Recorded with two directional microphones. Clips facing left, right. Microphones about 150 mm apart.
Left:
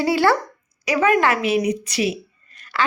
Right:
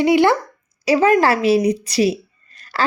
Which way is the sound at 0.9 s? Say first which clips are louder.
Right 4 dB; 30° right (ahead or behind).